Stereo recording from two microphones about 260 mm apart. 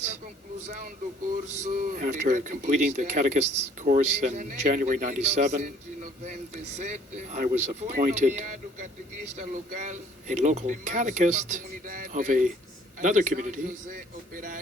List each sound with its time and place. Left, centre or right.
1.5 s speech: right